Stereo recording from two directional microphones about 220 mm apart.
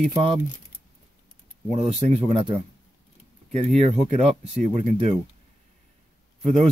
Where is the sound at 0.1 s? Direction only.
20° right (ahead or behind).